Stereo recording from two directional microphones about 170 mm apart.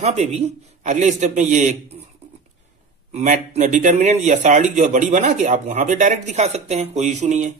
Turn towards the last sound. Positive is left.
turn(degrees=-45)  # may be behind; listen again after turning